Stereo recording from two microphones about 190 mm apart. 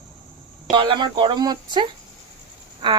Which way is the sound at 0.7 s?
25° right (ahead or behind).